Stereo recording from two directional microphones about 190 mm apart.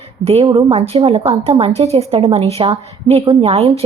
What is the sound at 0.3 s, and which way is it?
A woman's voice, 30° right (ahead or behind).